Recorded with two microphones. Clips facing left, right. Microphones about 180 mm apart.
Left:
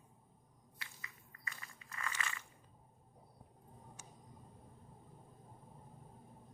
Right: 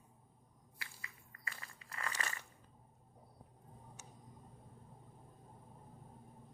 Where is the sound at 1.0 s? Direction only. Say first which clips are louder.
Right 1 dB; 30° right (ahead or behind).